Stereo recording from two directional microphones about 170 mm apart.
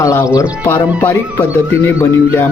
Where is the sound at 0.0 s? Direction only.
20° left (ahead or behind).